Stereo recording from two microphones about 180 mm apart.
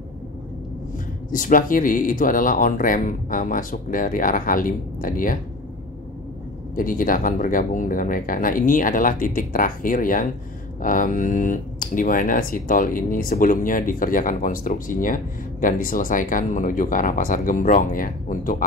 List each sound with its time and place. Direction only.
1.3 s speech: 50° left (ahead or behind)
6.7 s speech: 50° left (ahead or behind)